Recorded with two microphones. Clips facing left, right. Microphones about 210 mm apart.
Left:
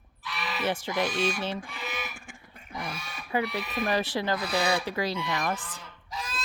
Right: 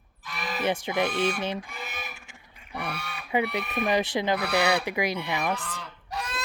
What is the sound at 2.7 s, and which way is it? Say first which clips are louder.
Speech: right 3 dB; 65° right (ahead or behind).